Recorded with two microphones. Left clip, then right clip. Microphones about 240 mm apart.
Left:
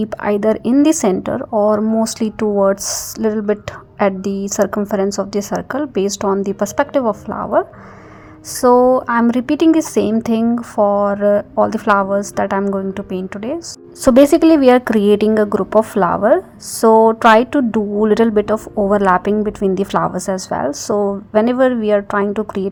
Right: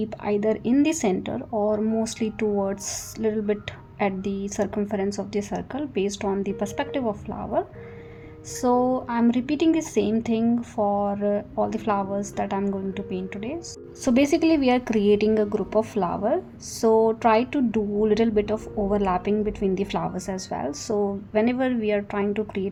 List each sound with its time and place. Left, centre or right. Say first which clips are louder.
0.0 s a woman's voice: left 8 dB; left
8.6 s a woman's voice: left 11 dB; left